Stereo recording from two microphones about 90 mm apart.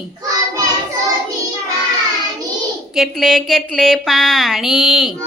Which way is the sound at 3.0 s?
Centre (ahead or behind).